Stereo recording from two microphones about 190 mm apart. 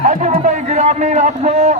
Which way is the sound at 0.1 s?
40° right (ahead or behind).